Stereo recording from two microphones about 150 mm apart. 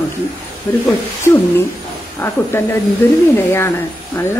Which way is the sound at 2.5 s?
15° left (ahead or behind).